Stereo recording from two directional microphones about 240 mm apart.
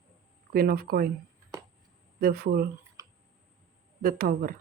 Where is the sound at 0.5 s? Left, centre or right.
Right.